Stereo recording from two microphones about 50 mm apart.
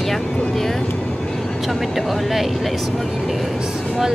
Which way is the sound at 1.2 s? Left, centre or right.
Centre.